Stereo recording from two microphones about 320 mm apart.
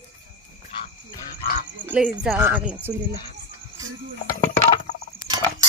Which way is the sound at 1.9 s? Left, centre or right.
Centre.